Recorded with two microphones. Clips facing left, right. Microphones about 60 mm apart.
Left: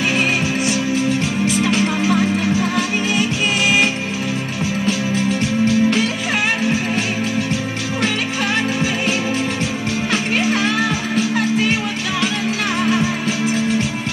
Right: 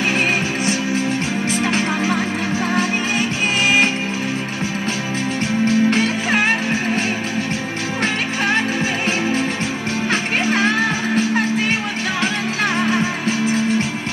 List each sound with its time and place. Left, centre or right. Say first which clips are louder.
1.5 s music: left 1 dB; right
5.7 s music: right 1 dB; right
10.4 s music: right 1 dB; right
12.9 s music: left 1 dB; right